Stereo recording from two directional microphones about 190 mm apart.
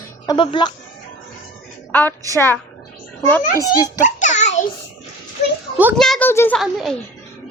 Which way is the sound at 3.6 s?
20° left (ahead or behind).